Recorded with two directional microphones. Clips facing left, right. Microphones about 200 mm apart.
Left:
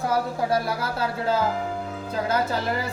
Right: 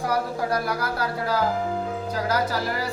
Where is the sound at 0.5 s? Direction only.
25° left (ahead or behind).